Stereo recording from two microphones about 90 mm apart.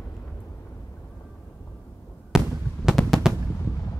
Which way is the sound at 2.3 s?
5° right (ahead or behind).